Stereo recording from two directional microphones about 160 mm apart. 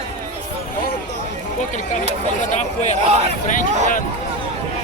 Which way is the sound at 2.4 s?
45° left (ahead or behind).